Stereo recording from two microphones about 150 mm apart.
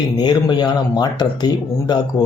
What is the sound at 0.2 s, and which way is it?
Speech, 30° left (ahead or behind).